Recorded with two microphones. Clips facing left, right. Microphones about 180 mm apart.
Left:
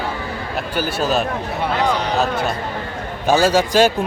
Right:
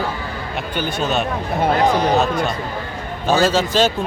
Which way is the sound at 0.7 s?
5° left (ahead or behind).